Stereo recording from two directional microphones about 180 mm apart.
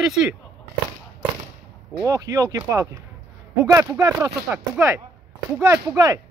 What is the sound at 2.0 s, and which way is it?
Speech, 20° right (ahead or behind).